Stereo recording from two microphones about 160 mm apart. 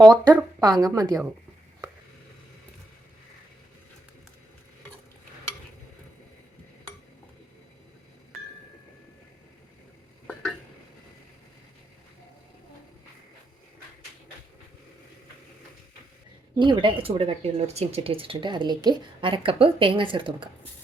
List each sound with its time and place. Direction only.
0.0 s speech: 25° right (ahead or behind)
16.6 s speech: 30° right (ahead or behind)